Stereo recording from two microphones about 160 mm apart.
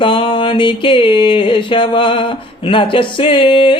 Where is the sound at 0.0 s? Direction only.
30° left (ahead or behind).